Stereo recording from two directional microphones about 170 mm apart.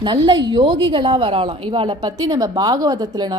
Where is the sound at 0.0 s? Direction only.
25° right (ahead or behind).